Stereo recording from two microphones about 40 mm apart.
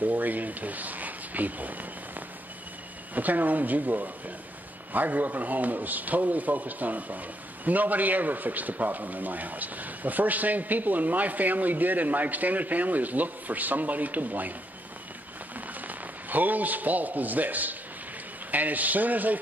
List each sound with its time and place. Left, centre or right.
0.0 s a man's voice: right
15.5 s a man's voice: right